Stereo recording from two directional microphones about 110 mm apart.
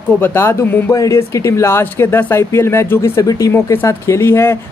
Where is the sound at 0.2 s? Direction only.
20° left (ahead or behind).